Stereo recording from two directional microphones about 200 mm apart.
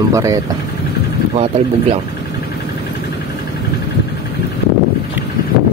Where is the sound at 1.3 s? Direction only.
30° right (ahead or behind).